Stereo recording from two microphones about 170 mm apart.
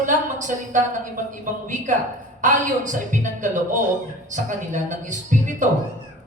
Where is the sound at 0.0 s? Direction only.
50° right (ahead or behind).